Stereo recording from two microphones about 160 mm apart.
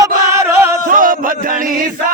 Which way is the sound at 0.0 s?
15° right (ahead or behind).